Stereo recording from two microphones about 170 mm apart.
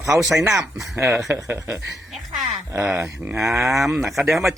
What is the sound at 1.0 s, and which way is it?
Speech, 15° right (ahead or behind).